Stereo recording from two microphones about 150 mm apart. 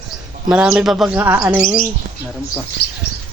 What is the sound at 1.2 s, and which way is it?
Speech, 15° right (ahead or behind).